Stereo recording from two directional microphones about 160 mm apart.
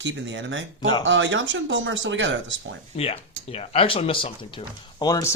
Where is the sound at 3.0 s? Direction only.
40° left (ahead or behind).